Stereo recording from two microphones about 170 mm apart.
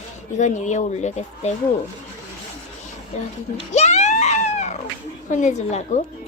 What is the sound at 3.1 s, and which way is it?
Speech, 40° left (ahead or behind).